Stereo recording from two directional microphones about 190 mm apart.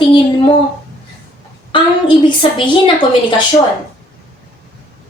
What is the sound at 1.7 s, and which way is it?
A woman's voice, 25° left (ahead or behind).